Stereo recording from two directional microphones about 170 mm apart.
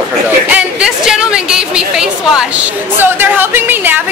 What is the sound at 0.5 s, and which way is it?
A woman's voice, 5° right (ahead or behind).